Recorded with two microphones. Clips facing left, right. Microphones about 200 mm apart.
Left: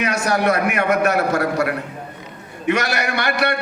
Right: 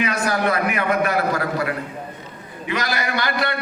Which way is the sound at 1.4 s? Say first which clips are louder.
Left 4 dB; 70° left (ahead or behind).